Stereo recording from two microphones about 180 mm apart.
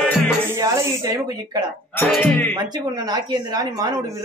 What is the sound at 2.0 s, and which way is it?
Speech, 10° left (ahead or behind).